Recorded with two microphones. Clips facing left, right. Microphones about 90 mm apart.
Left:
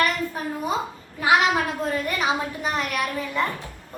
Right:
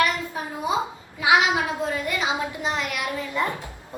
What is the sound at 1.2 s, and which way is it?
Speech, 45° left (ahead or behind).